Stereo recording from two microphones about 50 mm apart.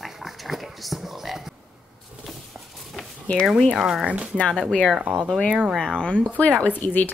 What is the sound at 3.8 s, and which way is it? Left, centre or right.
Speech, centre.